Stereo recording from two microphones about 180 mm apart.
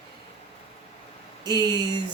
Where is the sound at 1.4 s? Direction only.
25° right (ahead or behind).